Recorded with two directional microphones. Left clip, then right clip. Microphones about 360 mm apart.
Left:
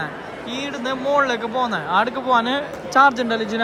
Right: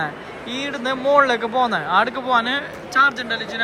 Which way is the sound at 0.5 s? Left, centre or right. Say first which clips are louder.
Right 2 dB; centre.